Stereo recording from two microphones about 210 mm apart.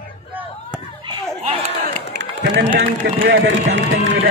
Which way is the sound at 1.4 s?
30° right (ahead or behind).